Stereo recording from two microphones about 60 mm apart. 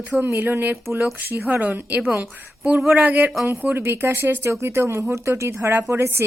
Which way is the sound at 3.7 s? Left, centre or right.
Right.